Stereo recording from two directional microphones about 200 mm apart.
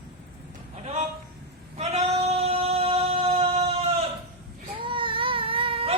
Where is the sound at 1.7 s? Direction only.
30° right (ahead or behind).